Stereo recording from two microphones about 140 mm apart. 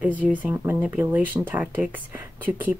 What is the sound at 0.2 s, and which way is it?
Speech, 10° right (ahead or behind).